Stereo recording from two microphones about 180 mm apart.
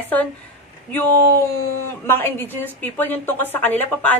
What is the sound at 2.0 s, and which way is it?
A woman's voice, 10° left (ahead or behind).